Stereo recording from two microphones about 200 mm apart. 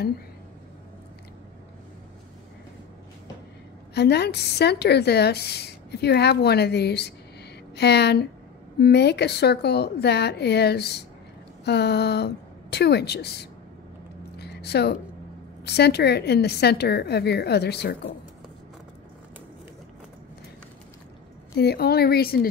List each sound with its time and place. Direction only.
3.9 s a woman's voice: 55° left (ahead or behind)
14.4 s a sound: 55° left (ahead or behind)
15.6 s a woman's voice: 55° left (ahead or behind)
21.5 s speech: 50° left (ahead or behind)